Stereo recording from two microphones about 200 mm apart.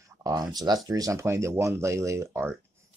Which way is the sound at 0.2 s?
20° right (ahead or behind).